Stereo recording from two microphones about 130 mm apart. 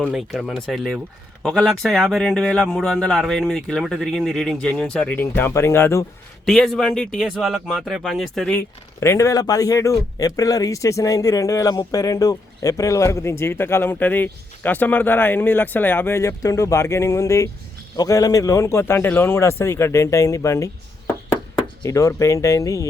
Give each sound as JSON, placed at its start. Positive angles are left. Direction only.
{"t": 0.1, "sound": "speech", "side_deg": 0}
{"t": 6.4, "sound": "speech", "side_deg": 5}
{"t": 8.5, "sound": "speech", "side_deg": 20}
{"t": 21.8, "sound": "speech", "side_deg": 25}